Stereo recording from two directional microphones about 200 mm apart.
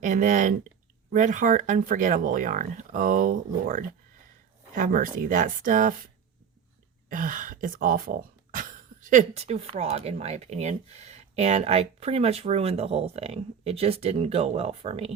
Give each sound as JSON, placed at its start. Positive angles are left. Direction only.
{"t": 0.0, "sound": "speech", "side_deg": -40}
{"t": 7.1, "sound": "speech", "side_deg": -40}